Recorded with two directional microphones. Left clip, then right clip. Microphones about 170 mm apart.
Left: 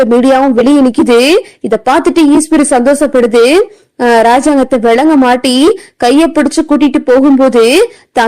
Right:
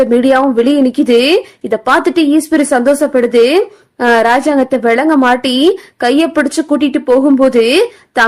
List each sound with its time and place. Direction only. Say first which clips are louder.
0.1 s speech: left 3 dB; 25° left (ahead or behind)